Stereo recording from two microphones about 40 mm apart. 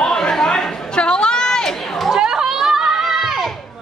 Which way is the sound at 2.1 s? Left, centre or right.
Centre.